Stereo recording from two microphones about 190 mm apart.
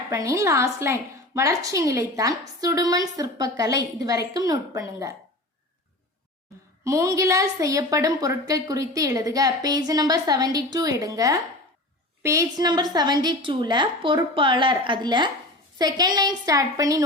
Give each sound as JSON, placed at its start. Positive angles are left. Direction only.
{"t": 0.1, "sound": "a woman's voice", "side_deg": -15}
{"t": 6.8, "sound": "a woman's voice", "side_deg": -15}